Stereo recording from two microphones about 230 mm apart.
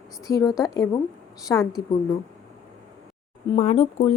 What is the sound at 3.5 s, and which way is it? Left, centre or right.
Speech, left.